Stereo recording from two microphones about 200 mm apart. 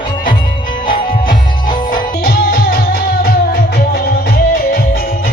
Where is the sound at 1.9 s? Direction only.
45° left (ahead or behind).